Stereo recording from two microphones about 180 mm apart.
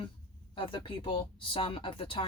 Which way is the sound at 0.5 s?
25° left (ahead or behind).